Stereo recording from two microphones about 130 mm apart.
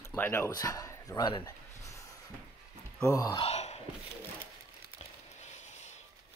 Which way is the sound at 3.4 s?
55° left (ahead or behind).